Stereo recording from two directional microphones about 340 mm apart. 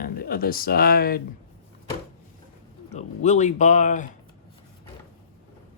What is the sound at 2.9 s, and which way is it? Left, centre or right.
Speech, centre.